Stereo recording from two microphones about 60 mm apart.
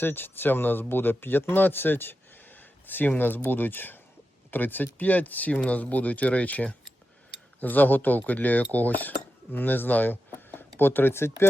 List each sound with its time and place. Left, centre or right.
0.0 s speech: left